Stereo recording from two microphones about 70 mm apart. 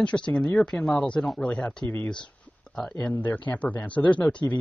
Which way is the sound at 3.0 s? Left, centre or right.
Left.